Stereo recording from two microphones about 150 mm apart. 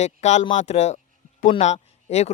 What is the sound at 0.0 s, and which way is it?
Speech, 50° left (ahead or behind).